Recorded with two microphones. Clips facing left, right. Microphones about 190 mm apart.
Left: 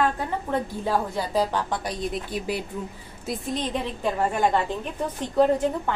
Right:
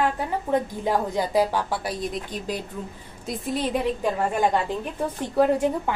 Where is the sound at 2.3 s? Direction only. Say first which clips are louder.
Left 2 dB; 10° left (ahead or behind).